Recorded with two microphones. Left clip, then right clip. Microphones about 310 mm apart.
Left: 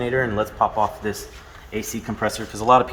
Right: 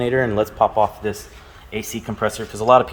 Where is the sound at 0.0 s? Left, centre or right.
Right.